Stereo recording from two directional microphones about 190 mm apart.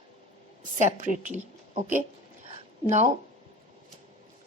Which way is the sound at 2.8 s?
35° right (ahead or behind).